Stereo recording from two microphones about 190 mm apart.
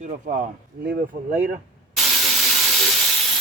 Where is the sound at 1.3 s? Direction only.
10° right (ahead or behind).